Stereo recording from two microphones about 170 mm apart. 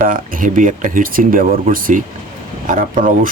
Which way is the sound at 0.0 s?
55° right (ahead or behind).